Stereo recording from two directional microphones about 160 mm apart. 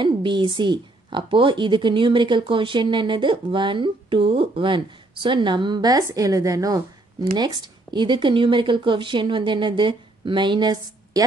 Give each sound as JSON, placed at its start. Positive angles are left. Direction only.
{"t": 0.0, "sound": "a woman's voice", "side_deg": -30}